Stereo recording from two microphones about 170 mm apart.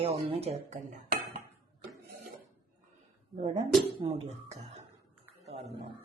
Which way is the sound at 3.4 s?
40° right (ahead or behind).